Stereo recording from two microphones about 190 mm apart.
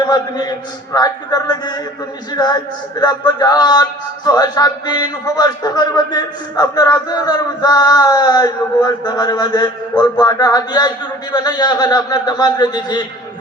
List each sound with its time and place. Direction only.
0.0 s speech: 20° left (ahead or behind)